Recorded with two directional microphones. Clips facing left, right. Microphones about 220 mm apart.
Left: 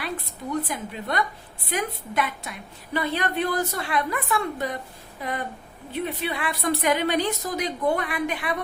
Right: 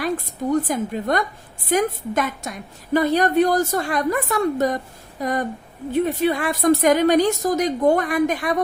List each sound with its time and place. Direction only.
0.0 s a woman's voice: 45° right (ahead or behind)